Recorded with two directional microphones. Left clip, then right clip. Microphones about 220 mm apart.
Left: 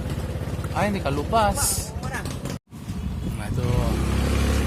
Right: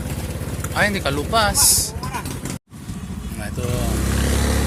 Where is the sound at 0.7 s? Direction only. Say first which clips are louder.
Right 5 dB; 10° left (ahead or behind).